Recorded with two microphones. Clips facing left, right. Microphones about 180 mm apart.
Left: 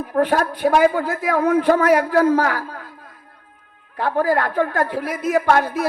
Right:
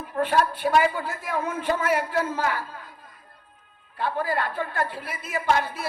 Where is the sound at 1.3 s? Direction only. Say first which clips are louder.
Left 12 dB; 70° left (ahead or behind).